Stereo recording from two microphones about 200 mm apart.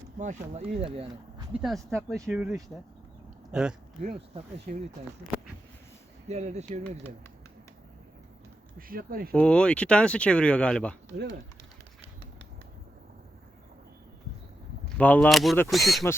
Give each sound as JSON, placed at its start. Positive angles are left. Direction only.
{"t": 0.2, "sound": "speech", "side_deg": -35}
{"t": 1.6, "sound": "speech", "side_deg": 0}
{"t": 4.4, "sound": "speech", "side_deg": -35}
{"t": 6.2, "sound": "speech", "side_deg": -35}
{"t": 8.9, "sound": "speech", "side_deg": -45}
{"t": 9.3, "sound": "speech", "side_deg": 5}
{"t": 14.9, "sound": "speech", "side_deg": 5}